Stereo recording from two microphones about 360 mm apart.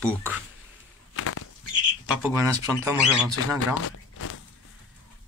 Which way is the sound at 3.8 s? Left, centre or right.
Left.